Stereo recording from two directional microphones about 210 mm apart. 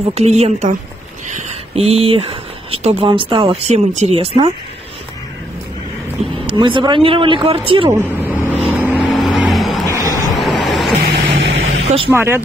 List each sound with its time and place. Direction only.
0.1 s a woman's voice: 30° right (ahead or behind)
6.4 s speech: 25° right (ahead or behind)
8.0 s vehicle: 10° right (ahead or behind)
9.9 s vehicle: 15° left (ahead or behind)
10.6 s vehicle: centre (ahead or behind)
11.3 s vehicle: 60° right (ahead or behind)
11.8 s vehicle: 30° right (ahead or behind)
12.1 s speech: 10° right (ahead or behind)